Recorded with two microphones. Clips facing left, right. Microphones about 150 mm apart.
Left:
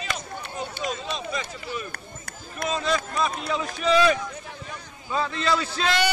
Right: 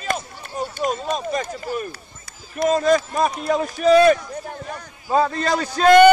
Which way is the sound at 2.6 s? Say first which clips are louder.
Right 9 dB; 45° right (ahead or behind).